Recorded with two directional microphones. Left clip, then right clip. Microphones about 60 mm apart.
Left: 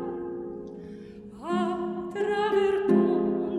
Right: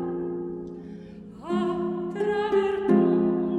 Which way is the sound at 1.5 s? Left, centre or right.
Left.